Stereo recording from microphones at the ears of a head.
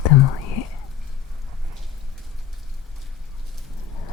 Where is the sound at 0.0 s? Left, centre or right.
Left.